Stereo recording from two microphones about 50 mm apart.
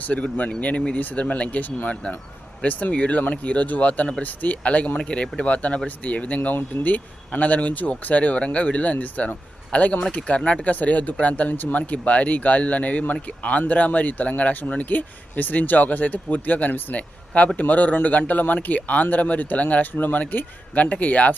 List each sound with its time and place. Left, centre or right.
0.2 s speech: left